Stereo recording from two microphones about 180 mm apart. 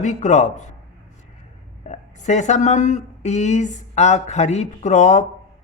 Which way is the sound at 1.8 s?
40° left (ahead or behind).